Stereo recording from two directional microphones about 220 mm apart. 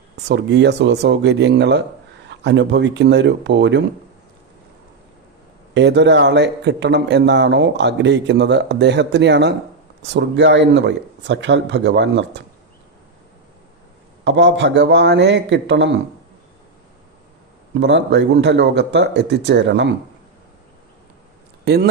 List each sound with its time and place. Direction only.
0.3 s a man's voice: 50° right (ahead or behind)
5.7 s a man's voice: 50° right (ahead or behind)
14.3 s a man's voice: 55° right (ahead or behind)
17.7 s a man's voice: 55° right (ahead or behind)
21.6 s speech: 45° right (ahead or behind)